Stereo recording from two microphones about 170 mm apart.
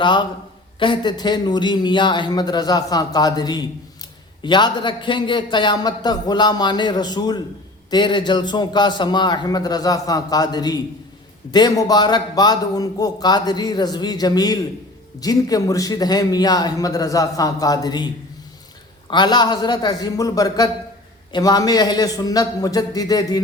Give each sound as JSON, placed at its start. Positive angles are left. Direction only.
{"t": 0.0, "sound": "a man's voice", "side_deg": 25}
{"t": 19.1, "sound": "a man's voice", "side_deg": 25}